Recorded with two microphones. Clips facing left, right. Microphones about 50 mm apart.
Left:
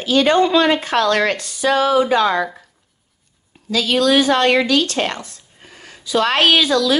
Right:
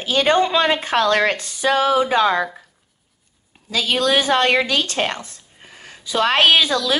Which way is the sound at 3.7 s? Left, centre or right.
Right.